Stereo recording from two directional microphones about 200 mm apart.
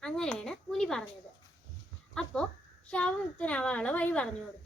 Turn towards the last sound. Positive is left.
turn(degrees=5)  # may be behind; listen again after turning